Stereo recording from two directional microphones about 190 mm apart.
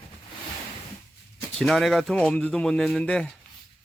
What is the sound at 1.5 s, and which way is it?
Speech, centre (ahead or behind).